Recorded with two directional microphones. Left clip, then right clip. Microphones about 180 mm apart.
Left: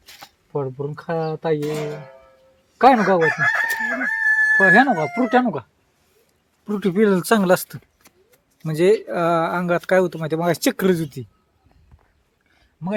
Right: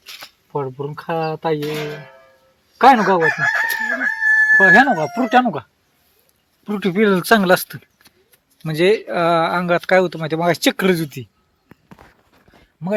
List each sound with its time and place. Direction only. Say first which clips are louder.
0.1 s camera: right 5 dB; 25° left (ahead or behind)
0.5 s speech: right 2 dB; 5° right (ahead or behind)
3.2 s chicken: right 2 dB; 25° right (ahead or behind)
4.5 s speech: right 3 dB; 10° right (ahead or behind)
6.7 s speech: right 2 dB; 10° right (ahead or behind)
8.0 s a sound: right 1 dB; 25° left (ahead or behind)
8.6 s speech: right 1 dB; 5° right (ahead or behind)